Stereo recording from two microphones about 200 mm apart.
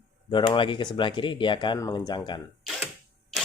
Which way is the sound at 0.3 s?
25° left (ahead or behind).